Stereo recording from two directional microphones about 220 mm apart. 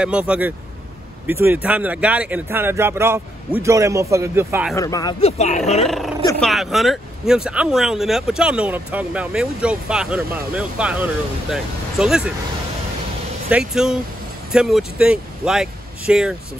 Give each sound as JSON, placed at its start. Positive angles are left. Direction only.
{"t": 0.0, "sound": "speech", "side_deg": -5}
{"t": 4.7, "sound": "speech", "side_deg": 15}
{"t": 5.2, "sound": "speech", "side_deg": 30}
{"t": 5.9, "sound": "speech", "side_deg": 0}
{"t": 13.5, "sound": "speech", "side_deg": -5}